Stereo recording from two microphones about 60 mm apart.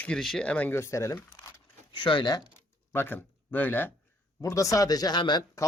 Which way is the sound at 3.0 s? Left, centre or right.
Left.